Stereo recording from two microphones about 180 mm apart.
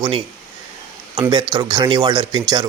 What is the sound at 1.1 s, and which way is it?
Speech, 20° right (ahead or behind).